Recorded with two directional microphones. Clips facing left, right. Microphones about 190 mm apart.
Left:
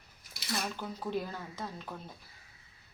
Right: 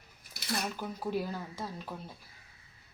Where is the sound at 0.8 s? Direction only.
10° right (ahead or behind).